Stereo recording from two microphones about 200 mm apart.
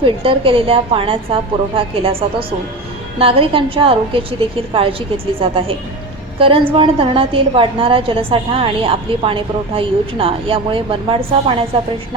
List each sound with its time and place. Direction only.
0.3 s a woman's voice: 25° right (ahead or behind)
3.2 s a woman's voice: 30° right (ahead or behind)